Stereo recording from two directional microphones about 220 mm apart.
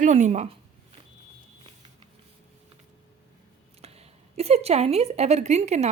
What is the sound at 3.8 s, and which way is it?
Speech, 30° right (ahead or behind).